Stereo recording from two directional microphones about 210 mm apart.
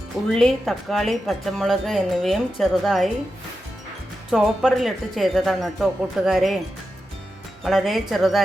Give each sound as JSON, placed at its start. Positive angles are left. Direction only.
{"t": 0.3, "sound": "speech", "side_deg": 0}
{"t": 4.3, "sound": "speech", "side_deg": -5}
{"t": 7.6, "sound": "speech", "side_deg": 0}